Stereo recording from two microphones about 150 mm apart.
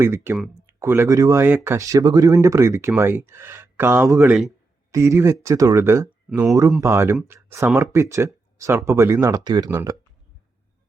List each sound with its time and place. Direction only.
0.0 s speech: 15° right (ahead or behind)